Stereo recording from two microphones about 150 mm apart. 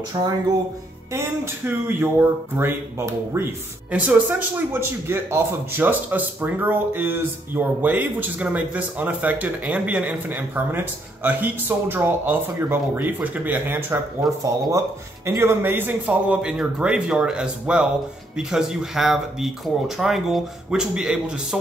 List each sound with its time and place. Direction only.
0.1 s speech: 25° right (ahead or behind)
1.1 s a man's voice: 15° right (ahead or behind)
14.2 s speech: centre (ahead or behind)
15.2 s a man's voice: 15° right (ahead or behind)